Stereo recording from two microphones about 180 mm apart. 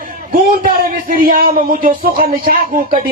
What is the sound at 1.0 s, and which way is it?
Speech, 50° right (ahead or behind).